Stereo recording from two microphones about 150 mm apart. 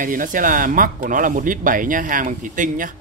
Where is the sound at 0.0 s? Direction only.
65° right (ahead or behind).